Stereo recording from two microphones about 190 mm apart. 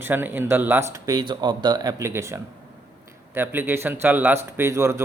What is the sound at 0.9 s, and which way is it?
A man's voice, 20° right (ahead or behind).